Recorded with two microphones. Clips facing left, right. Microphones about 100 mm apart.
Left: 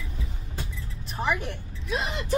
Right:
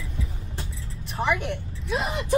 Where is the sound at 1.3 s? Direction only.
35° left (ahead or behind).